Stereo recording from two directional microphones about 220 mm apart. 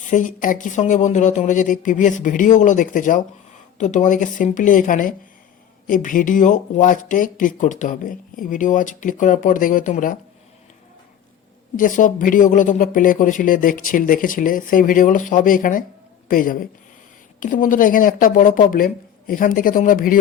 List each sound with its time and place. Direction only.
0.0 s speech: 35° left (ahead or behind)
11.8 s speech: 35° left (ahead or behind)